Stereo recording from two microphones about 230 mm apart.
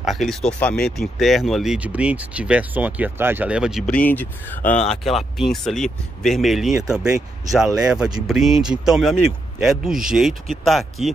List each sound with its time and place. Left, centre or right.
0.0 s speech: centre